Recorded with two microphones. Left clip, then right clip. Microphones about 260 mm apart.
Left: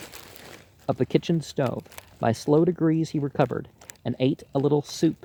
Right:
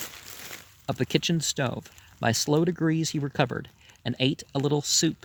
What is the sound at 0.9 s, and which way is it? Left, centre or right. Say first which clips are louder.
Speech: left 3 dB; right.